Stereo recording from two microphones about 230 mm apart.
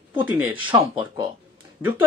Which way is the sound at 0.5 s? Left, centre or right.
Centre.